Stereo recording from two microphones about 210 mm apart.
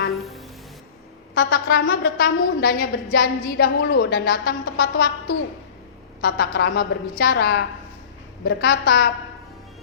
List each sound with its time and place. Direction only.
0.1 s music: centre (ahead or behind)
1.4 s a woman's voice: 45° left (ahead or behind)
6.2 s a woman's voice: 50° left (ahead or behind)